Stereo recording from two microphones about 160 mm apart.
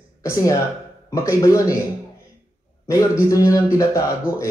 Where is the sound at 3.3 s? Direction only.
20° left (ahead or behind).